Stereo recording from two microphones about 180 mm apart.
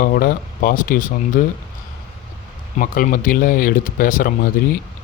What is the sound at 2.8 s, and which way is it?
Speech, 50° left (ahead or behind).